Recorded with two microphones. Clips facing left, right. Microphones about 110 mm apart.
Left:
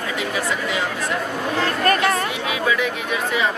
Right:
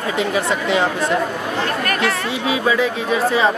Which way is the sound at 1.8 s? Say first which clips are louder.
Left 5 dB; 35° left (ahead or behind).